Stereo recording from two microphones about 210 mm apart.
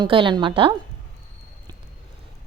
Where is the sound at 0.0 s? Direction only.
25° right (ahead or behind).